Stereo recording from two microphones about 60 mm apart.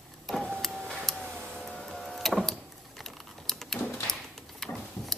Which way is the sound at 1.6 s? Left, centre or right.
Centre.